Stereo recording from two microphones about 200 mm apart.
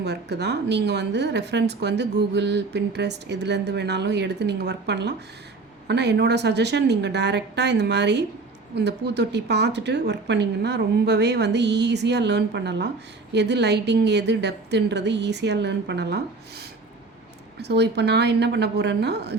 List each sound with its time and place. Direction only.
0.0 s a woman's voice: 55° right (ahead or behind)